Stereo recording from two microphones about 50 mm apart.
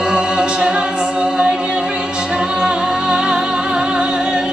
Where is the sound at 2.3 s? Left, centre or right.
Centre.